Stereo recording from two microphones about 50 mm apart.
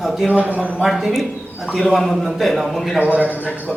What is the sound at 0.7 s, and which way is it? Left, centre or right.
A man's voice, centre.